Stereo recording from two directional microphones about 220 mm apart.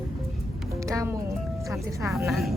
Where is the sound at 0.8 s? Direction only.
15° right (ahead or behind).